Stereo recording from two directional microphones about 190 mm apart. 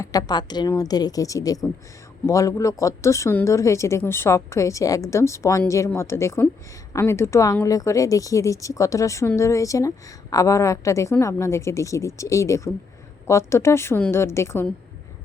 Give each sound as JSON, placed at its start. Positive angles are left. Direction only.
{"t": 0.0, "sound": "a woman's voice", "side_deg": 20}